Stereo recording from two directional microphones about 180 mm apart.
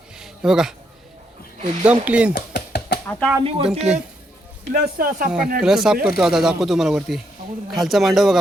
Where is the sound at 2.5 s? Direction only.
60° left (ahead or behind).